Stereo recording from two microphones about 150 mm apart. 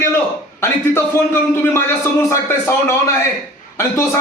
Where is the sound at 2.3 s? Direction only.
20° left (ahead or behind).